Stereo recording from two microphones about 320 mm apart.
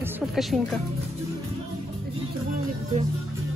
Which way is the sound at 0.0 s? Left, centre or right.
Centre.